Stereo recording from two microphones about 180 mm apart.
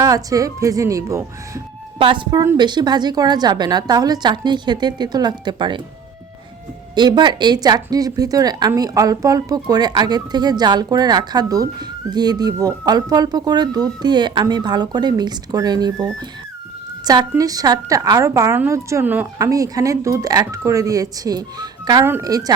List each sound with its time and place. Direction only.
0.0 s a woman's voice: 20° right (ahead or behind)
2.0 s a woman's voice: 30° right (ahead or behind)
6.9 s a woman's voice: 25° right (ahead or behind)